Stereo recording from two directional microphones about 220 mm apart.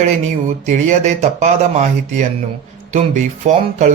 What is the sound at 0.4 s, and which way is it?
Speech, 30° right (ahead or behind).